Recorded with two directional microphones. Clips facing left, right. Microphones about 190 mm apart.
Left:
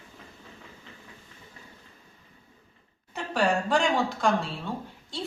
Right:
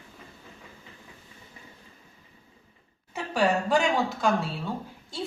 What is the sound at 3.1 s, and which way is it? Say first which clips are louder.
A woman's voice: right 1 dB; 5° right (ahead or behind).